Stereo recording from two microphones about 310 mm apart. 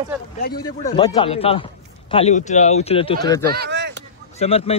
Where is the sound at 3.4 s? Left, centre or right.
Right.